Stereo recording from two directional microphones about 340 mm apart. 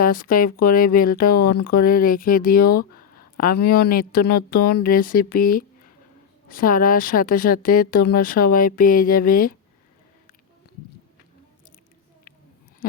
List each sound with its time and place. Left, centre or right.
0.0 s speech: left